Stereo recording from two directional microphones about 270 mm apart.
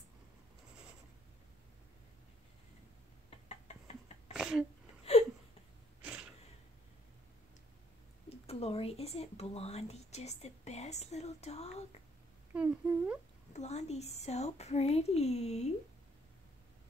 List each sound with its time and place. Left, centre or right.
3.3 s a sound: left
4.3 s sneeze: centre
5.1 s a sound: left
8.3 s speech: left
12.5 s a woman's voice: centre
13.5 s speech: left